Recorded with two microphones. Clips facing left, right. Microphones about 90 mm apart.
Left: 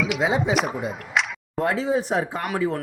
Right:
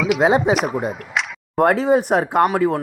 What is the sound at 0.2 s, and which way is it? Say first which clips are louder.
Speech: right 8 dB; 55° right (ahead or behind).